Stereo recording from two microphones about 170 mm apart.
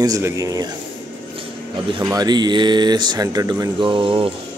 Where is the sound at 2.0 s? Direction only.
25° right (ahead or behind).